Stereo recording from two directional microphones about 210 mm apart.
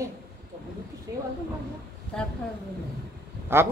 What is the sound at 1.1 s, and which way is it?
Speech, 15° right (ahead or behind).